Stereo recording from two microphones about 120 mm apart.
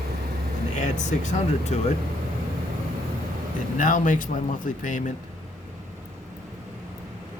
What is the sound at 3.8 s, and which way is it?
Speech, 90° left.